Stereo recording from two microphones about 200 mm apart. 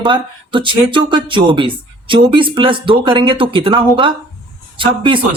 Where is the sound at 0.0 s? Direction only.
25° right (ahead or behind).